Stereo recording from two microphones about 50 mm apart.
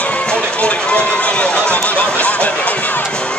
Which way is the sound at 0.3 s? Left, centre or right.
Left.